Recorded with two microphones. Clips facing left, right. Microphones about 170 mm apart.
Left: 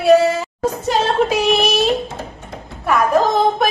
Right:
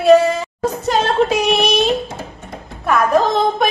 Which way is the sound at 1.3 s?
Centre (ahead or behind).